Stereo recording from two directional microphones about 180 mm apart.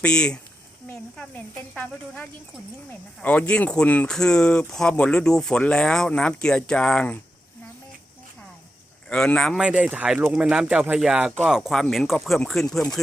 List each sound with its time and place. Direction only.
0.0 s speech: 5° left (ahead or behind)
9.0 s speech: 5° left (ahead or behind)